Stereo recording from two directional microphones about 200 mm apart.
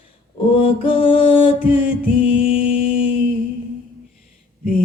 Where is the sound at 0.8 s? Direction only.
25° left (ahead or behind).